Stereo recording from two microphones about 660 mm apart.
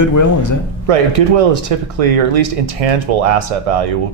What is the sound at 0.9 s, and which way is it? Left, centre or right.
Speech, right.